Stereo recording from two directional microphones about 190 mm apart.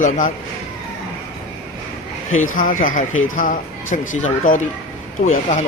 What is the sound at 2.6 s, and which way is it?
Speech, 45° left (ahead or behind).